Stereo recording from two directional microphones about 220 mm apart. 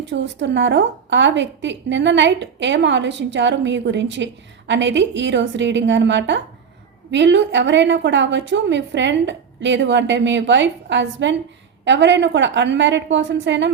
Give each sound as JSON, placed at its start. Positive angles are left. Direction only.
{"t": 0.0, "sound": "a woman's voice", "side_deg": -55}